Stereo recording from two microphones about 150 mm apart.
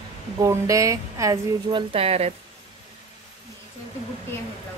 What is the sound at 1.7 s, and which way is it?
Speech, 40° right (ahead or behind).